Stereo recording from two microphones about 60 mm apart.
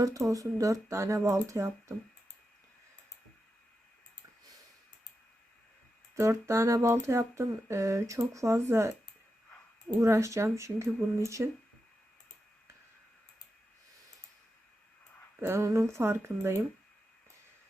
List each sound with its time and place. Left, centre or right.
0.0 s speech: right
6.1 s speech: right
10.0 s speech: right
15.4 s speech: right